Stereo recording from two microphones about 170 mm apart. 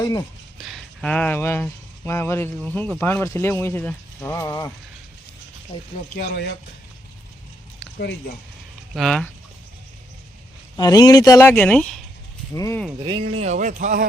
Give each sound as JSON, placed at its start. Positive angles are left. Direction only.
{"t": 0.0, "sound": "speech", "side_deg": 20}
{"t": 0.6, "sound": "speech", "side_deg": 5}
{"t": 5.7, "sound": "speech", "side_deg": 35}
{"t": 6.1, "sound": "speech", "side_deg": 85}
{"t": 7.9, "sound": "speech", "side_deg": 70}
{"t": 9.0, "sound": "speech", "side_deg": 5}
{"t": 10.8, "sound": "speech", "side_deg": 20}
{"t": 12.5, "sound": "speech", "side_deg": 20}
{"t": 13.3, "sound": "speech", "side_deg": -40}